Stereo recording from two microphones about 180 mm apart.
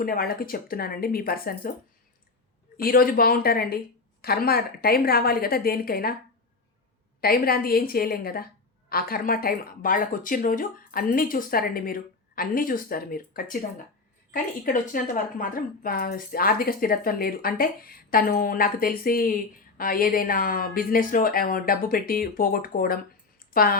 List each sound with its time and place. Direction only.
0.0 s a woman's voice: 55° left (ahead or behind)
2.8 s a woman's voice: 55° left (ahead or behind)
7.2 s a woman's voice: 55° left (ahead or behind)